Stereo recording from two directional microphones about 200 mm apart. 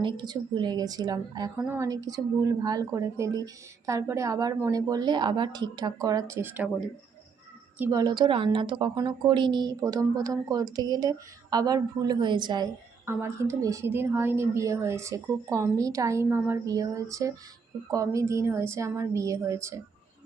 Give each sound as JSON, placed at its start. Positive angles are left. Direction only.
{"t": 0.0, "sound": "a woman's voice", "side_deg": -20}